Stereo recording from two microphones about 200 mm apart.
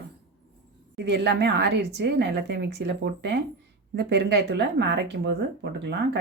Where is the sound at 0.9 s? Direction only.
60° right (ahead or behind).